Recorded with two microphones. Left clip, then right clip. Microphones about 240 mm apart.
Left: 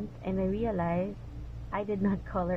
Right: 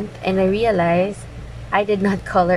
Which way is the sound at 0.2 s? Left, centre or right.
Centre.